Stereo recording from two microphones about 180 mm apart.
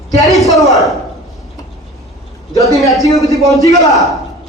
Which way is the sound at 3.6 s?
20° left (ahead or behind).